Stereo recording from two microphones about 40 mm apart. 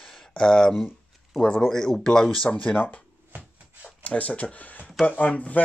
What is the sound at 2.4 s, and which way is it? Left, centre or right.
Speech, left.